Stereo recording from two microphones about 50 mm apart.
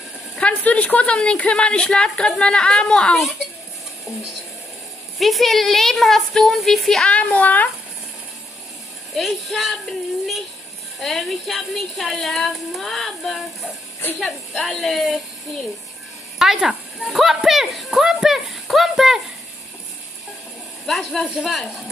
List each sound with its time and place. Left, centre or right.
0.4 s a sound: left
1.1 s a woman's voice: centre
5.2 s speech: centre
7.1 s a woman's voice: left
9.1 s speech: centre
16.3 s speech: centre
20.8 s speech: centre